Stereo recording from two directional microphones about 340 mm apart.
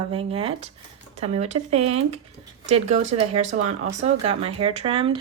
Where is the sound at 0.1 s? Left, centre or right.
Centre.